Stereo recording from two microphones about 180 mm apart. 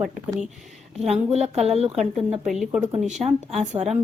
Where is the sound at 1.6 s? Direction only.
35° right (ahead or behind).